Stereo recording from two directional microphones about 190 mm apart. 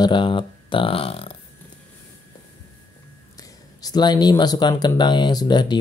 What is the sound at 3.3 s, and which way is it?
Speech, 20° left (ahead or behind).